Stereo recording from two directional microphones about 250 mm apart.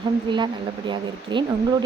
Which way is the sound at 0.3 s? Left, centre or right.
Centre.